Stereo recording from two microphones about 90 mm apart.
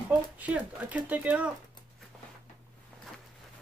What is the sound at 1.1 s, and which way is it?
Speech, 15° right (ahead or behind).